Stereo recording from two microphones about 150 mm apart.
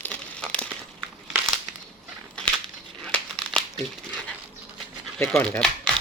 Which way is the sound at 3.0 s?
5° left (ahead or behind).